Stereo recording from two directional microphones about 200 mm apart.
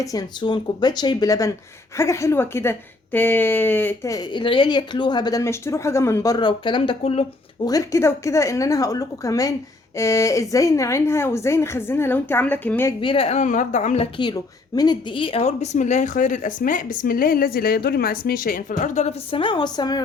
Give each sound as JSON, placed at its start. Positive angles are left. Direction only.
{"t": 0.0, "sound": "a woman's voice", "side_deg": 20}
{"t": 7.7, "sound": "a woman's voice", "side_deg": 15}
{"t": 13.0, "sound": "speech", "side_deg": 25}